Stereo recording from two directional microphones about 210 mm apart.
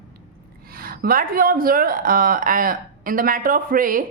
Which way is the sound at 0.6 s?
45° right (ahead or behind).